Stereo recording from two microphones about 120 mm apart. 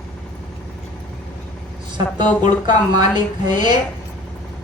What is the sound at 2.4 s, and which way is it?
A woman's voice, 40° right (ahead or behind).